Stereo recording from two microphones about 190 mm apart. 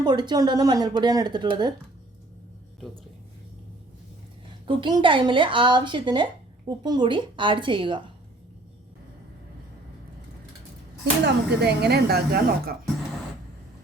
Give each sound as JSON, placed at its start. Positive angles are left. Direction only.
{"t": 0.0, "sound": "speech", "side_deg": -20}
{"t": 4.6, "sound": "speech", "side_deg": -25}
{"t": 11.3, "sound": "speech", "side_deg": -60}